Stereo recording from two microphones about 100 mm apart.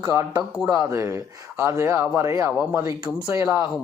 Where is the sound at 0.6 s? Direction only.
35° right (ahead or behind).